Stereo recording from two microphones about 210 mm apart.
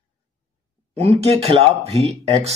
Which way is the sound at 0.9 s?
30° right (ahead or behind).